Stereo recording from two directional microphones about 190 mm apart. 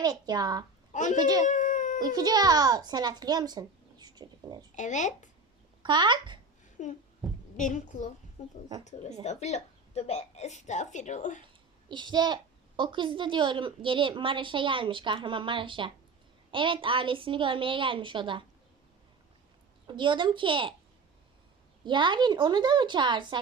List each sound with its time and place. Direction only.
0.0 s a child's voice: 20° right (ahead or behind)
0.9 s a woman's voice: 40° left (ahead or behind)
1.2 s a child's voice: 20° right (ahead or behind)
1.5 s a sound: 40° left (ahead or behind)
2.1 s a child's voice: 20° right (ahead or behind)
4.7 s a woman's voice: 40° left (ahead or behind)
5.8 s a child's voice: 25° right (ahead or behind)
6.8 s a woman's voice: 40° left (ahead or behind)
11.9 s a child's voice: 25° right (ahead or behind)
19.9 s a child's voice: 25° right (ahead or behind)
21.8 s a child's voice: 25° right (ahead or behind)